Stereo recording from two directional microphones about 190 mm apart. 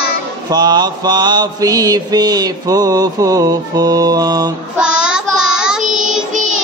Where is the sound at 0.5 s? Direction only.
20° right (ahead or behind).